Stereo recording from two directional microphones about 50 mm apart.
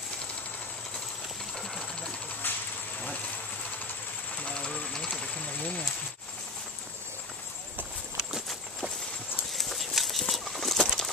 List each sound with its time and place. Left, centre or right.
2.4 s insect: left
4.4 s a sound: centre
8.2 s walk: centre
9.5 s clip-clop: centre
10.3 s patter: centre